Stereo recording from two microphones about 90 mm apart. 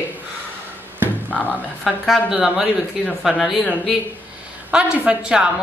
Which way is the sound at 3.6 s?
15° left (ahead or behind).